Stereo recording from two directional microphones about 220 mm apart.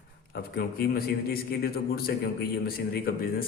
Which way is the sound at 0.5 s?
45° left (ahead or behind).